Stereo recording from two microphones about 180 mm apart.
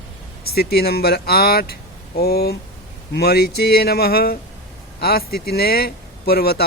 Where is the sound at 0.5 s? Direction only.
60° left (ahead or behind).